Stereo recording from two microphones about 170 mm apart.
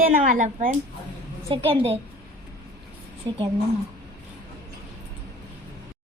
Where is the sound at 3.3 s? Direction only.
25° right (ahead or behind).